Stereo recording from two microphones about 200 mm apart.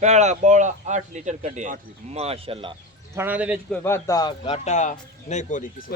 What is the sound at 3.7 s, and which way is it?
Speech, 10° left (ahead or behind).